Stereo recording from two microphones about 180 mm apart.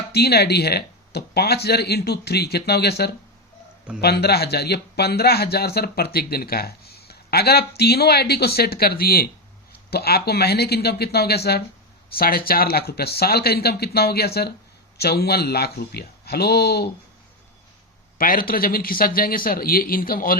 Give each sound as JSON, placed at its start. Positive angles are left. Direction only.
{"t": 0.1, "sound": "speech", "side_deg": 65}
{"t": 18.2, "sound": "a man's voice", "side_deg": 50}